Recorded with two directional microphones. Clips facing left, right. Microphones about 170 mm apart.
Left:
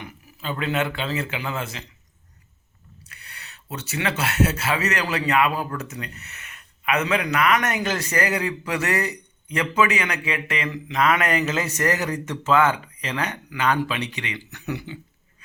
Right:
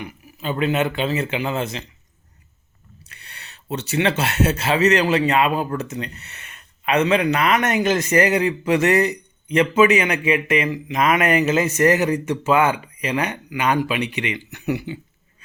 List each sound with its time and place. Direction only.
0.0 s speech: 20° right (ahead or behind)
3.1 s speech: 30° right (ahead or behind)